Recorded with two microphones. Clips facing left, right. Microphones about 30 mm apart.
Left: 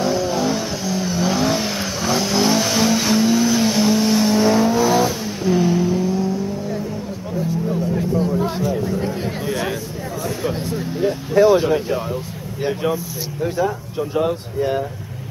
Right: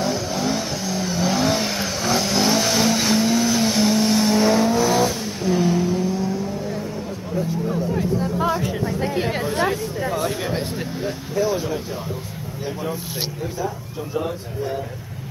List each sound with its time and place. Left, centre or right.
0.0 s vehicle: centre
8.6 s chatter: right
11.3 s a sound: left